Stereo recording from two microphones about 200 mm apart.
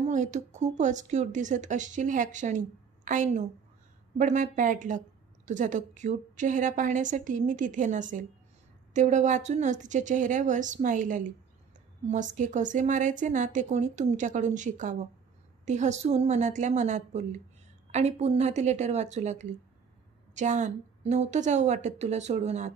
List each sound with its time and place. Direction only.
0.0 s a woman's voice: 35° right (ahead or behind)
12.4 s a woman's voice: 40° right (ahead or behind)